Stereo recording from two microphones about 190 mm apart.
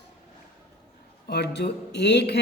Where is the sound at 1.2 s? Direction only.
60° left (ahead or behind).